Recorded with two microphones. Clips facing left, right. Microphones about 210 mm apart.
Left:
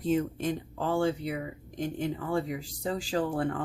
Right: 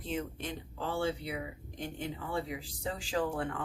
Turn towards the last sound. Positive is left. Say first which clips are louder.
# left 4 dB
turn(degrees=35)  # may be behind; listen again after turning